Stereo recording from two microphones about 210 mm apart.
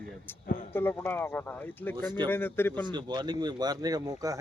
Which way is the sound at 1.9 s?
20° right (ahead or behind).